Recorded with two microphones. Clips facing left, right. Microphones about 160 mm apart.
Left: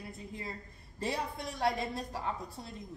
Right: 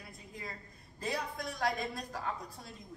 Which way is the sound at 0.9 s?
25° left (ahead or behind).